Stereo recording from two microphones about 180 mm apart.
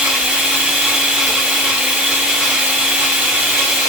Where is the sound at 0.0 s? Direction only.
5° right (ahead or behind).